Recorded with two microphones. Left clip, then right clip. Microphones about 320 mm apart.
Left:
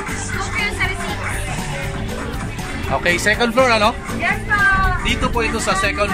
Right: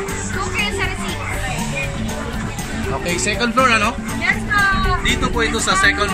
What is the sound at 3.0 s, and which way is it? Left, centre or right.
Speech, left.